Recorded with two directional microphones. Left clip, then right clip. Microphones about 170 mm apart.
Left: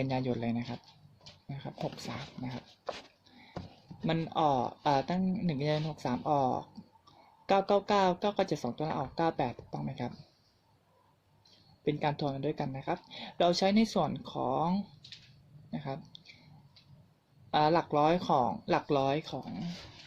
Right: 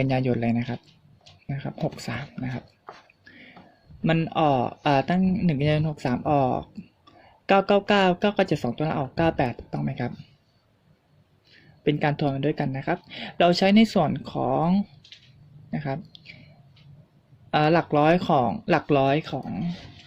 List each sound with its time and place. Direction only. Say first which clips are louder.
0.0 s speech: right 9 dB; 40° right (ahead or behind)
4.0 s speech: right 7 dB; 35° right (ahead or behind)
11.8 s speech: right 8 dB; 35° right (ahead or behind)
15.7 s a sound: right 9 dB; 35° right (ahead or behind)
17.5 s speech: right 6 dB; 35° right (ahead or behind)